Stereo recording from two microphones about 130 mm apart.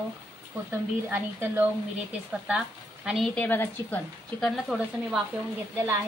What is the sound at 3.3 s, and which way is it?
Speech, 15° left (ahead or behind).